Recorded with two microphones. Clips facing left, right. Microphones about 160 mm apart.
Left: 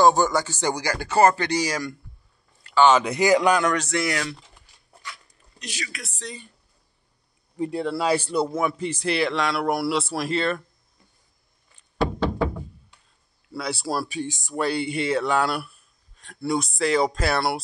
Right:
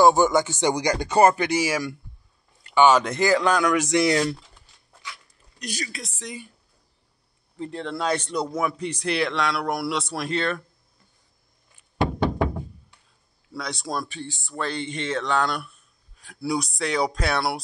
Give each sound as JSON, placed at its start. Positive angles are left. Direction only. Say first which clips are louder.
{"t": 0.0, "sound": "speech", "louder": "right 1 dB", "side_deg": -20}
{"t": 2.8, "sound": "a man's voice", "louder": "even", "side_deg": 5}
{"t": 3.6, "sound": "speech", "louder": "right 3 dB", "side_deg": -10}
{"t": 5.7, "sound": "speech", "louder": "right 3 dB", "side_deg": -40}
{"t": 5.9, "sound": "speech", "louder": "right 1 dB", "side_deg": -15}
{"t": 7.5, "sound": "speech", "louder": "left 5 dB", "side_deg": 10}
{"t": 13.5, "sound": "speech", "louder": "left 3 dB", "side_deg": 5}